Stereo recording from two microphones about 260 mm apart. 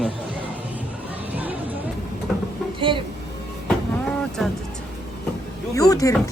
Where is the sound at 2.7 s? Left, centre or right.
Centre.